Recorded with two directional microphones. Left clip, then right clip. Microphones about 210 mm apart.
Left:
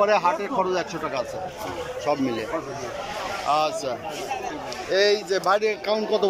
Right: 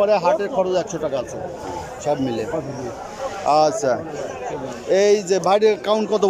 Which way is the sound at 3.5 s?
25° right (ahead or behind).